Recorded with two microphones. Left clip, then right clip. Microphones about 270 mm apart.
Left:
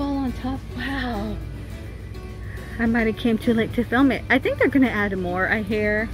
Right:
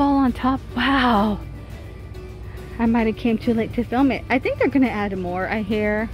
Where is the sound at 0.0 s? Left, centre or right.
Right.